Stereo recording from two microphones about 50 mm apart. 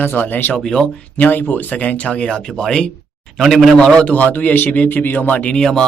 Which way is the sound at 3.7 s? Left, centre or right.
Centre.